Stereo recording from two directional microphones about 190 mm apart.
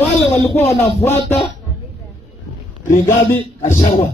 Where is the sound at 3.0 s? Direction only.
10° left (ahead or behind).